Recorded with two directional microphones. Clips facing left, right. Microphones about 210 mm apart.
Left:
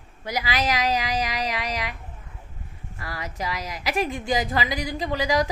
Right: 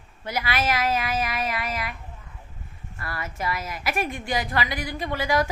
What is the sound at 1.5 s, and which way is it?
Speech, 90° left.